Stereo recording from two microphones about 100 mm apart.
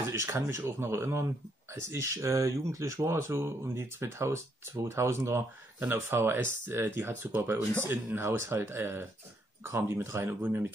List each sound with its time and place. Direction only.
0.1 s speech: 25° right (ahead or behind)